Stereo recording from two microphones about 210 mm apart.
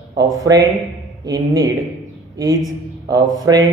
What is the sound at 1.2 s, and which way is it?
A woman's voice, 15° right (ahead or behind).